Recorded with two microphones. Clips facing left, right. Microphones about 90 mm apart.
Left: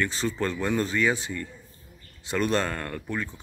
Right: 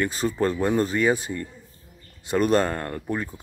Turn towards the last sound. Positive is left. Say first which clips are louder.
# right 3 dB
turn(degrees=-30)  # may be behind; listen again after turning